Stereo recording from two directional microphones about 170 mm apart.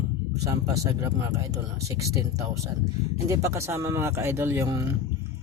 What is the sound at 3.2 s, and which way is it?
Speech, 15° right (ahead or behind).